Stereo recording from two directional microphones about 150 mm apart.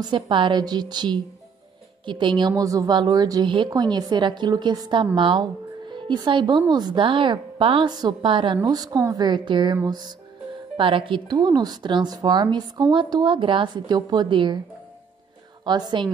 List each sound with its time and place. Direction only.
0.0 s a woman's voice: 35° right (ahead or behind)
15.6 s a woman's voice: 30° right (ahead or behind)